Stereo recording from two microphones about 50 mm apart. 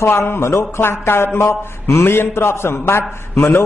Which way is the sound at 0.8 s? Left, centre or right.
Left.